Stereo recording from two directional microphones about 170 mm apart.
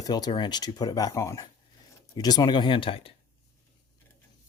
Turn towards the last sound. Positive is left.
turn(degrees=35)  # may be behind; listen again after turning